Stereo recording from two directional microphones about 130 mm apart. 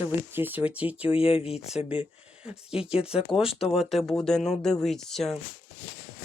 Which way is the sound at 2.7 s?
45° left (ahead or behind).